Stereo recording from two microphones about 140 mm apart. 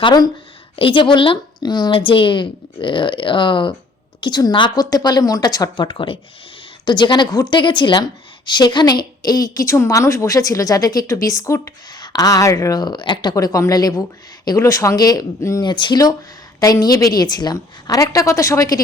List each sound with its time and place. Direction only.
0.0 s a woman's voice: 30° left (ahead or behind)
15.6 s a woman's voice: 35° left (ahead or behind)